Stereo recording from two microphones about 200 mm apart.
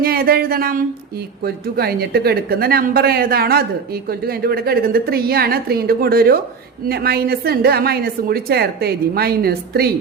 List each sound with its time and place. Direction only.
0.0 s a woman's voice: 50° right (ahead or behind)